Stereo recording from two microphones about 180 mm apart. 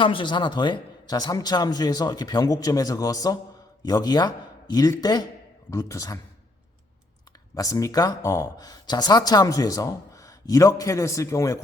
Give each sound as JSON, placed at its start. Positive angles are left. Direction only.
{"t": 0.0, "sound": "a man's voice", "side_deg": 30}
{"t": 7.5, "sound": "speech", "side_deg": 20}